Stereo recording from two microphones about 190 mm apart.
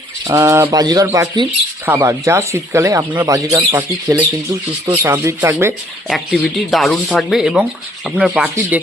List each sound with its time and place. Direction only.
0.3 s speech: 15° right (ahead or behind)
6.1 s speech: centre (ahead or behind)